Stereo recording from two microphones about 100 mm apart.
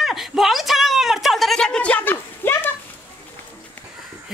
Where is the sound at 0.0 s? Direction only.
Centre (ahead or behind); by 2.7 s 20° left (ahead or behind).